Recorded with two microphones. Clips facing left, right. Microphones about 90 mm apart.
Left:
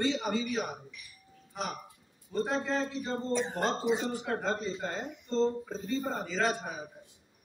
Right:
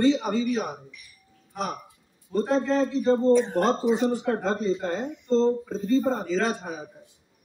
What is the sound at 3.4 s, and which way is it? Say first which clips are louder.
Speech: right 8 dB; centre (ahead or behind).